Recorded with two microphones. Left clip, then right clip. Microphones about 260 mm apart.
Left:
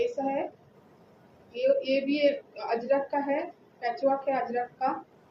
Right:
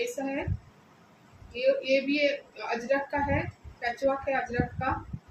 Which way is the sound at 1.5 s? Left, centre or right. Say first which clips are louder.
Even; centre.